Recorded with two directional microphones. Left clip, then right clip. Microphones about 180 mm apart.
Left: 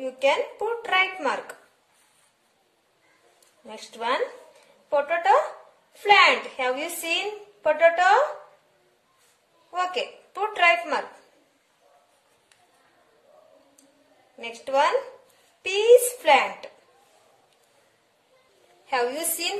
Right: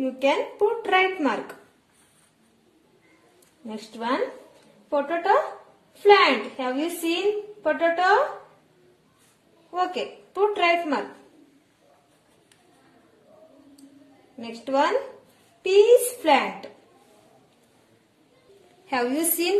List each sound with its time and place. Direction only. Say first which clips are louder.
0.0 s speech: even; centre (ahead or behind)
3.6 s a woman's voice: left 1 dB; 10° left (ahead or behind)
9.8 s a woman's voice: even; 15° left (ahead or behind)
14.4 s a woman's voice: left 1 dB; 15° left (ahead or behind)
16.2 s a woman's voice: left 1 dB; 15° left (ahead or behind)
18.9 s speech: right 1 dB; centre (ahead or behind)